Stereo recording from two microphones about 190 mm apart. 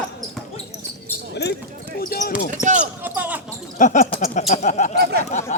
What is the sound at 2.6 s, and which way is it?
Speech, 40° right (ahead or behind).